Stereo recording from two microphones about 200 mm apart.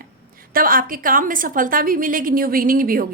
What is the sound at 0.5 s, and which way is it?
A woman's voice, 45° right (ahead or behind).